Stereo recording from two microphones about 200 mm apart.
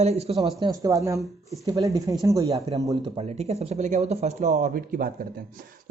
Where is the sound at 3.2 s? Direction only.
30° right (ahead or behind).